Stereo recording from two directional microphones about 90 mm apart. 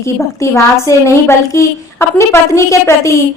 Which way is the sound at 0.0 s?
35° left (ahead or behind).